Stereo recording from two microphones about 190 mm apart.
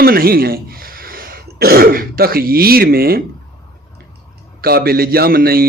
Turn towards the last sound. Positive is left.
turn(degrees=-50)  # may be behind; listen again after turning